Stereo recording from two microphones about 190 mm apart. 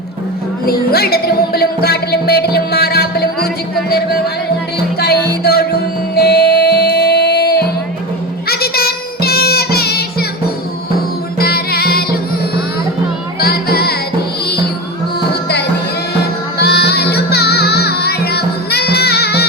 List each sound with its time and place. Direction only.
0.6 s speech: 55° left (ahead or behind)
6.1 s music: 55° left (ahead or behind)
11.3 s music: 55° left (ahead or behind)
15.2 s music: 60° left (ahead or behind)